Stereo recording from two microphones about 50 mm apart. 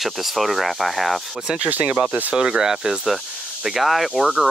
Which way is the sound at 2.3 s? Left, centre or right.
Centre.